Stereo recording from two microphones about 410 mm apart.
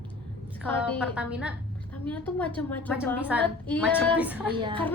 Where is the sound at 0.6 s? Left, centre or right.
Centre.